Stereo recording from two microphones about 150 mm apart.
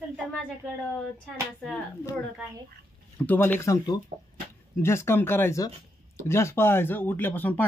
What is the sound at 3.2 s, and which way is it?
Speech, 10° left (ahead or behind).